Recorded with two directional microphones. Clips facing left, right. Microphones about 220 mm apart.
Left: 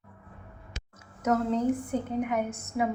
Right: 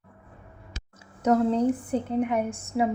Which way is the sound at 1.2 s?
35° right (ahead or behind).